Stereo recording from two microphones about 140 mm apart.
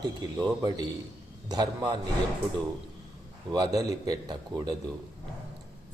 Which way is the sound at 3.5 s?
25° right (ahead or behind).